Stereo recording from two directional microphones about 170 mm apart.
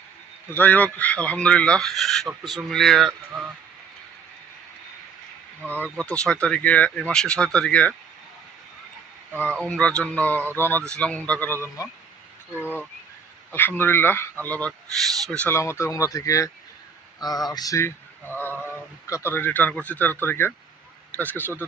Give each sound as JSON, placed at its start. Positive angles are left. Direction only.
{"t": 0.5, "sound": "speech", "side_deg": 10}
{"t": 5.6, "sound": "speech", "side_deg": 10}
{"t": 9.6, "sound": "speech", "side_deg": 5}
{"t": 13.5, "sound": "speech", "side_deg": 10}